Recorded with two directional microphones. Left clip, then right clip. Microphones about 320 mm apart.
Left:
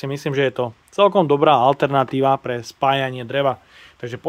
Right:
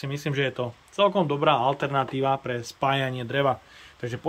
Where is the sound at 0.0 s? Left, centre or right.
Centre.